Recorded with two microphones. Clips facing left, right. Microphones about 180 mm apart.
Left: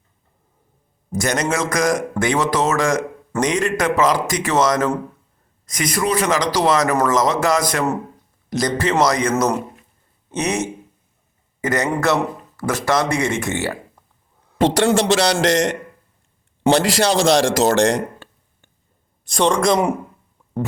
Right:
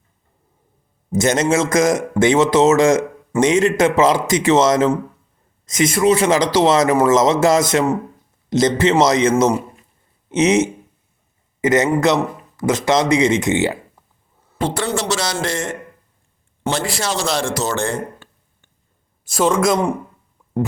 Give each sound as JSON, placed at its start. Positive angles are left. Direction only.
{"t": 1.1, "sound": "a man's voice", "side_deg": -25}
{"t": 14.6, "sound": "a man's voice", "side_deg": 90}
{"t": 15.1, "sound": "a man's voice", "side_deg": 70}
{"t": 16.8, "sound": "a man's voice", "side_deg": 90}
{"t": 19.2, "sound": "a man's voice", "side_deg": -5}